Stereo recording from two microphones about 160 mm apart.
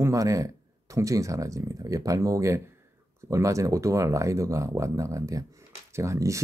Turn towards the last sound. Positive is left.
turn(degrees=-20)  # may be behind; listen again after turning